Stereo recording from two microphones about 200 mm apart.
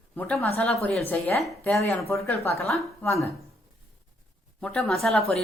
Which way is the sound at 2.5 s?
Centre (ahead or behind).